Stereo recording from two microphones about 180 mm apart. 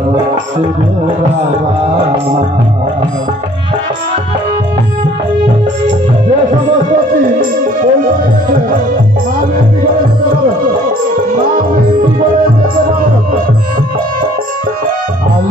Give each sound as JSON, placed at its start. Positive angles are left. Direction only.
{"t": 0.3, "sound": "music", "side_deg": -30}
{"t": 7.3, "sound": "music", "side_deg": -50}